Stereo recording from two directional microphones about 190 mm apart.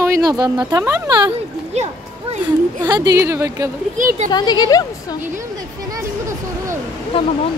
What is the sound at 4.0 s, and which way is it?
Speech, 45° right (ahead or behind).